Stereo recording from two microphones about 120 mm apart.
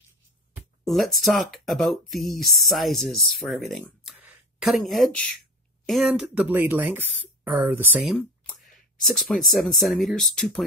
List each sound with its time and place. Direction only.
0.8 s speech: centre (ahead or behind)
6.2 s speech: 15° right (ahead or behind)
8.5 s speech: centre (ahead or behind)